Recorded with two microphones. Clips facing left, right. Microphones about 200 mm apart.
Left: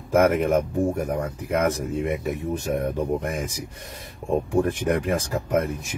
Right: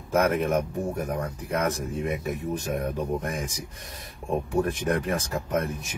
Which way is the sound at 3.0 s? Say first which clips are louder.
Left 3 dB; 20° left (ahead or behind).